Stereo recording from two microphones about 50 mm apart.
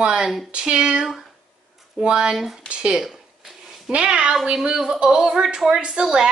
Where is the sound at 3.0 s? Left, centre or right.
Centre.